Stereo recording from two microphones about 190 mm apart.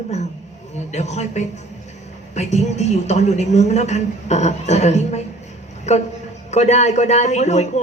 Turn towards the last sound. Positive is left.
turn(degrees=35)  # may be behind; listen again after turning